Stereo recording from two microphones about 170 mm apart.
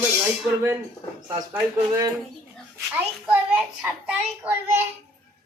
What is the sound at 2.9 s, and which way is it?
A man's voice, 10° right (ahead or behind).